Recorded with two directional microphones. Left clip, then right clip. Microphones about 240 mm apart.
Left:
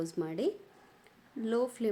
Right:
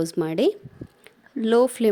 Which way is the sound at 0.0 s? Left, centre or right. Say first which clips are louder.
Right 12 dB; right.